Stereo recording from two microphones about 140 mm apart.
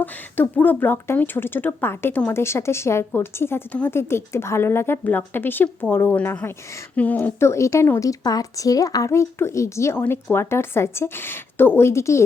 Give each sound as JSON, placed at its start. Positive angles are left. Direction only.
{"t": 0.0, "sound": "a woman's voice", "side_deg": 10}